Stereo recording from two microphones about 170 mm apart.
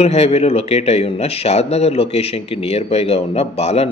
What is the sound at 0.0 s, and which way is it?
A man's voice, 40° left (ahead or behind).